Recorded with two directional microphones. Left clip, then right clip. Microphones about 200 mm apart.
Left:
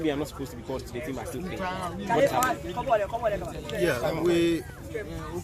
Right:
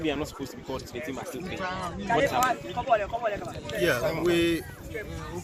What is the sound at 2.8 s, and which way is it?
Speech, 60° left (ahead or behind).